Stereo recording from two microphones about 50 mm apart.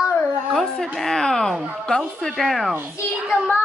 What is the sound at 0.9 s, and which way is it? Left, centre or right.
Speech, centre.